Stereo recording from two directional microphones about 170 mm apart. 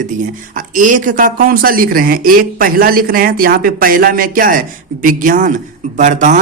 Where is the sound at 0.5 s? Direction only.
50° right (ahead or behind).